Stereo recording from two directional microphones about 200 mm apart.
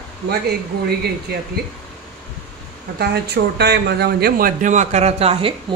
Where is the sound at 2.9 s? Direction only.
55° right (ahead or behind).